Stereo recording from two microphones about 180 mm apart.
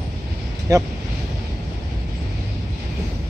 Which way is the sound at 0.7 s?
20° right (ahead or behind).